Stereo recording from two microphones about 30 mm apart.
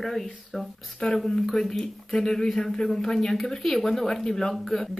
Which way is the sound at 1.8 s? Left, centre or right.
Centre.